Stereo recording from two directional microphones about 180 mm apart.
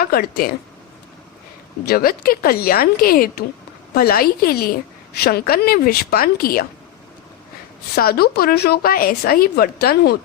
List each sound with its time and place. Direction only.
0.0 s a woman's voice: 55° left (ahead or behind)
1.8 s a woman's voice: 60° left (ahead or behind)
7.9 s a woman's voice: 60° left (ahead or behind)